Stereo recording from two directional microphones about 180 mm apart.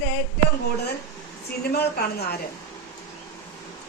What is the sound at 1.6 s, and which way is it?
Speech, 60° left (ahead or behind).